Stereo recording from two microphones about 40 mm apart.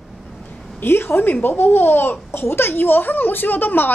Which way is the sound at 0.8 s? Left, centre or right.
Left.